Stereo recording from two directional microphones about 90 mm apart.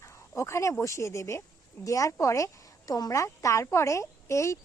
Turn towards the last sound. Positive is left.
turn(degrees=35)  # may be behind; listen again after turning